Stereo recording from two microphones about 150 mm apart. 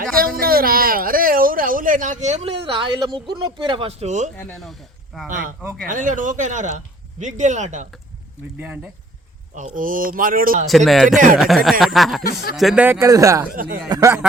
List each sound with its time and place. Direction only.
0.3 s speech: 80° right; by 4.3 s 50° right (ahead or behind)
4.6 s speech: centre (ahead or behind)
5.3 s speech: 65° right (ahead or behind)
8.5 s speech: 10° right (ahead or behind)
9.6 s speech: 60° right (ahead or behind)
10.7 s speech: centre (ahead or behind)
12.2 s speech: 80° left
12.5 s speech: centre (ahead or behind)
12.8 s speech: 15° right (ahead or behind)